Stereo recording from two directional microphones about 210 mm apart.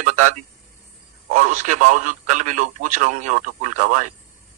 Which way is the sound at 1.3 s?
35° right (ahead or behind).